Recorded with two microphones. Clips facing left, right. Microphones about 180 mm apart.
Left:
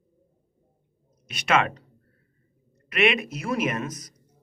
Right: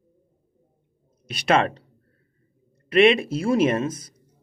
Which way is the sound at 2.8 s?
30° right (ahead or behind).